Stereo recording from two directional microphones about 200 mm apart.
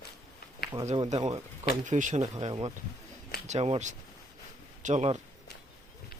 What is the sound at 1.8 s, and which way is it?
Speech, 40° right (ahead or behind).